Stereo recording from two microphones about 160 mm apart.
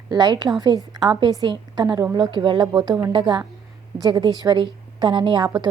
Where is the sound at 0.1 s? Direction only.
25° right (ahead or behind).